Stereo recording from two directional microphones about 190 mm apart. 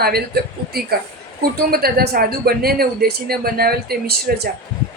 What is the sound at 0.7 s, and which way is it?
Speech, 55° right (ahead or behind).